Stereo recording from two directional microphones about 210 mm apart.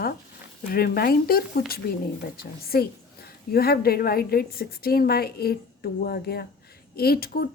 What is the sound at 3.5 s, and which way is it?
A woman's voice, 45° left (ahead or behind).